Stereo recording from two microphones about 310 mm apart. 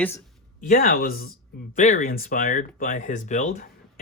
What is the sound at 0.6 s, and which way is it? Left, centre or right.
Speech, left.